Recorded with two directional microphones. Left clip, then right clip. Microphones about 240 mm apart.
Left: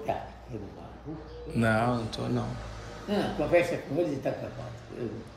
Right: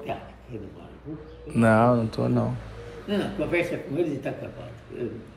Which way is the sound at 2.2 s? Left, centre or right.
Right.